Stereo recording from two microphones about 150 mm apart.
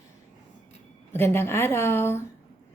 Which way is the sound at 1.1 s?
15° left (ahead or behind).